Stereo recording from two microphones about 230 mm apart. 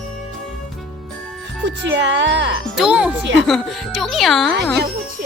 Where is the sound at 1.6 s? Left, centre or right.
Right.